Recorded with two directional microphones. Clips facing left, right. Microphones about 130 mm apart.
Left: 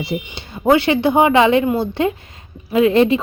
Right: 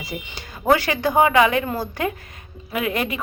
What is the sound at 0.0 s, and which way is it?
A woman's voice, 25° left (ahead or behind).